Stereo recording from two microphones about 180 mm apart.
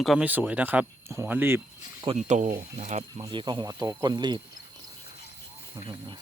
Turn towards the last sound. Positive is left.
turn(degrees=-25)  # may be behind; listen again after turning